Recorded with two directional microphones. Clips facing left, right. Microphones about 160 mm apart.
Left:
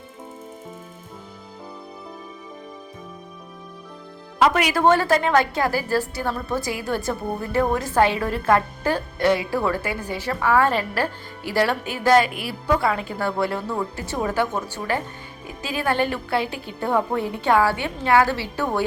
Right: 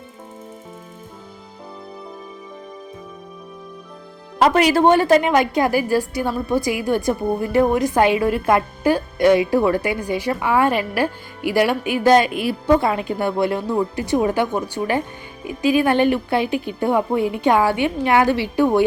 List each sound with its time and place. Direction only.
4.4 s a woman's voice: 35° right (ahead or behind); by 18.8 s 15° right (ahead or behind)